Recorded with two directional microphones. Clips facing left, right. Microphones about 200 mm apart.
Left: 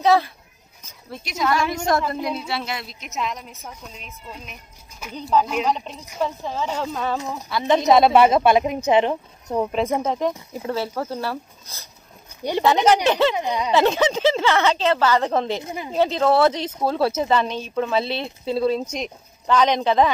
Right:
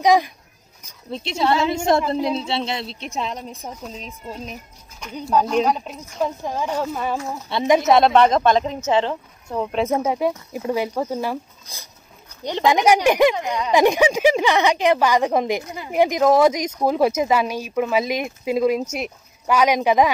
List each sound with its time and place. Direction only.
0.0 s speech: 15° right (ahead or behind)
1.1 s a woman's voice: 25° right (ahead or behind)
5.0 s speech: 5° left (ahead or behind)
5.7 s speech: 5° right (ahead or behind)
7.5 s a woman's voice: 25° right (ahead or behind)
7.9 s speech: 5° left (ahead or behind)
9.7 s speech: centre (ahead or behind)
13.4 s speech: 15° left (ahead or behind)
13.7 s speech: 15° right (ahead or behind)
15.6 s a woman's voice: 20° left (ahead or behind)
15.9 s speech: 15° right (ahead or behind)